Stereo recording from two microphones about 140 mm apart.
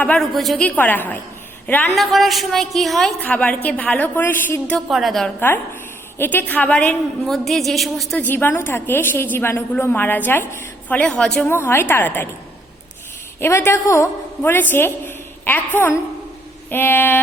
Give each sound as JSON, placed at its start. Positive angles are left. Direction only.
{"t": 0.0, "sound": "a woman's voice", "side_deg": 5}
{"t": 0.8, "sound": "a woman's voice", "side_deg": 15}
{"t": 2.0, "sound": "a woman's voice", "side_deg": 0}
{"t": 3.2, "sound": "a woman's voice", "side_deg": 10}
{"t": 4.9, "sound": "a woman's voice", "side_deg": 0}
{"t": 6.1, "sound": "a woman's voice", "side_deg": 15}
{"t": 8.2, "sound": "a woman's voice", "side_deg": 15}
{"t": 11.5, "sound": "a woman's voice", "side_deg": 15}
{"t": 13.4, "sound": "a woman's voice", "side_deg": 20}